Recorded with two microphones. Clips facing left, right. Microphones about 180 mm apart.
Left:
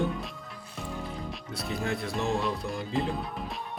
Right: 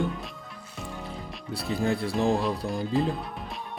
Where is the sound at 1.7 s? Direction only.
35° right (ahead or behind).